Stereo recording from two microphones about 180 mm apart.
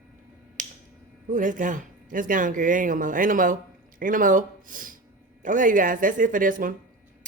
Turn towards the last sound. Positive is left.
turn(degrees=-50)  # may be behind; listen again after turning